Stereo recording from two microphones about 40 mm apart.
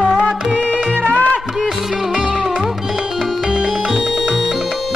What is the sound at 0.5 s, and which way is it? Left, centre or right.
Music, left.